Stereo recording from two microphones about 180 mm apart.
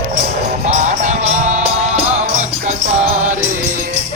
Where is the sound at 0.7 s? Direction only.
40° right (ahead or behind).